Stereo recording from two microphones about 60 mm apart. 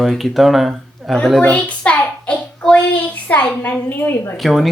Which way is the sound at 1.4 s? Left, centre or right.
Left.